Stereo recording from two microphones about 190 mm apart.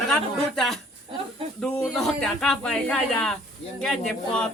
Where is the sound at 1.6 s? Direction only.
5° left (ahead or behind).